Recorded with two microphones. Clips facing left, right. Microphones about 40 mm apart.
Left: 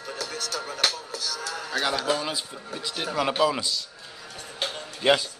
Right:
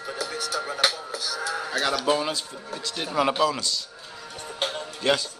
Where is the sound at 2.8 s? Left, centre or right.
Centre.